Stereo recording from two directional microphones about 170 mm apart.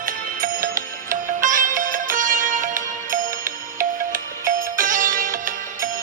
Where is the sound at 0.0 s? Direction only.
55° right (ahead or behind).